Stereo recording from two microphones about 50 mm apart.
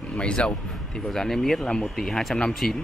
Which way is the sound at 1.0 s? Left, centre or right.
Centre.